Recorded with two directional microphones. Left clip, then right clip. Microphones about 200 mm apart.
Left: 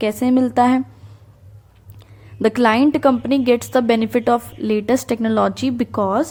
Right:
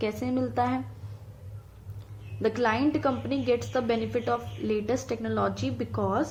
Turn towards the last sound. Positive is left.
turn(degrees=50)  # may be behind; listen again after turning